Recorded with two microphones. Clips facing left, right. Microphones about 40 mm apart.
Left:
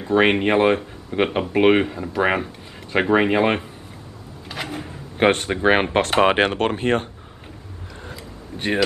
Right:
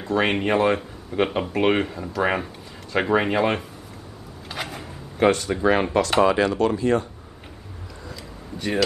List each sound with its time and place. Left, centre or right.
0.1 s speech: left
4.6 s speech: left
8.0 s a sound: left